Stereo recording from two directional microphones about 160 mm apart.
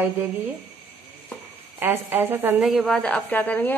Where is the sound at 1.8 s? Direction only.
15° right (ahead or behind).